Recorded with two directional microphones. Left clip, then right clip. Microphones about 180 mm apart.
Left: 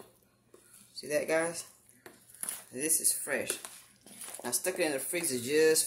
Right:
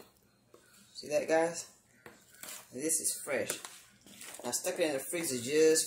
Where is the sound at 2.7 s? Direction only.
30° left (ahead or behind).